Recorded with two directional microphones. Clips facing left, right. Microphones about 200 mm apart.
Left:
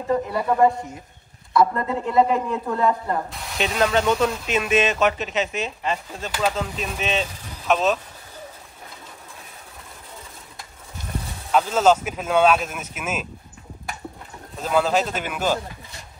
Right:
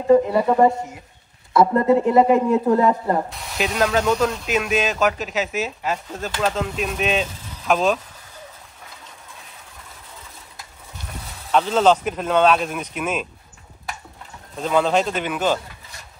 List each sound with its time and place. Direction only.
0.1 s speech: 25° right (ahead or behind)
3.3 s speech: centre (ahead or behind)
11.5 s speech: 5° left (ahead or behind)
14.6 s speech: 5° left (ahead or behind)